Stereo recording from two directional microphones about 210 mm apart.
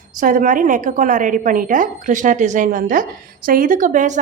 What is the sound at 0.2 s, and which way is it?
A woman's voice, 40° right (ahead or behind).